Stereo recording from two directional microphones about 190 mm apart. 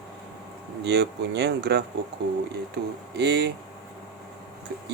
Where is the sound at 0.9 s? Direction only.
60° right (ahead or behind).